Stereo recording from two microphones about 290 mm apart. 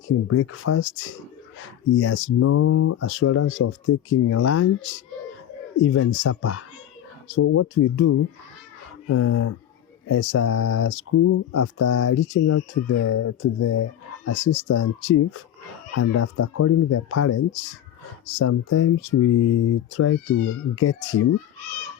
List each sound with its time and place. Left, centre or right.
0.3 s speech: left
2.0 s speech: left
5.8 s speech: left
14.3 s speech: left
15.9 s speech: left